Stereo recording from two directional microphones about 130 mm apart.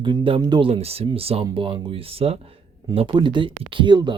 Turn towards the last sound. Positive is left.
turn(degrees=-35)  # may be behind; listen again after turning